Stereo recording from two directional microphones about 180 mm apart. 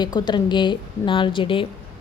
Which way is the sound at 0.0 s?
25° left (ahead or behind).